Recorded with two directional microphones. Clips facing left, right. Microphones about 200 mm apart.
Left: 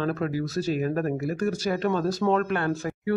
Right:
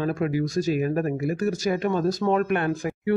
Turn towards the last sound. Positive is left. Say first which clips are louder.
# right 2 dB
turn(degrees=-15)  # may be behind; listen again after turning